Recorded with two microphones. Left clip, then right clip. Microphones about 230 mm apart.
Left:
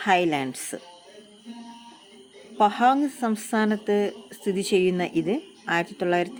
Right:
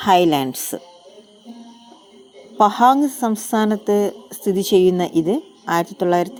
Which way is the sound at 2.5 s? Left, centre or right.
Centre.